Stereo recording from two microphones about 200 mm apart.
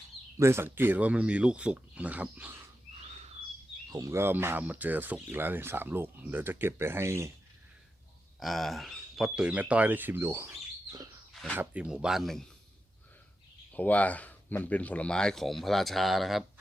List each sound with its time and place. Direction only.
0.3 s speech: 15° right (ahead or behind)
3.9 s speech: 15° right (ahead or behind)
8.4 s speech: centre (ahead or behind)
13.7 s speech: 10° left (ahead or behind)